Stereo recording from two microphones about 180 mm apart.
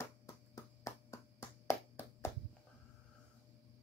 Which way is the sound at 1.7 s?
15° left (ahead or behind).